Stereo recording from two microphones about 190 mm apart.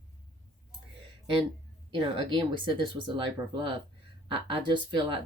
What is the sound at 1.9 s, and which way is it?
Speech, 25° right (ahead or behind).